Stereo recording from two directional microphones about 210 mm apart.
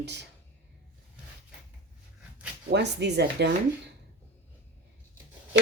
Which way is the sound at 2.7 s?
55° right (ahead or behind).